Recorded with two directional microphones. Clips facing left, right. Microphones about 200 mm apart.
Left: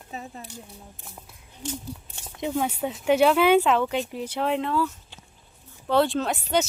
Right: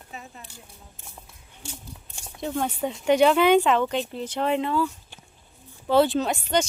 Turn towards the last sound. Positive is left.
turn(degrees=5)  # may be behind; listen again after turning